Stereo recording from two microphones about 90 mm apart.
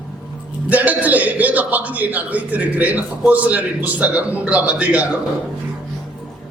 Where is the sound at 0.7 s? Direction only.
15° right (ahead or behind).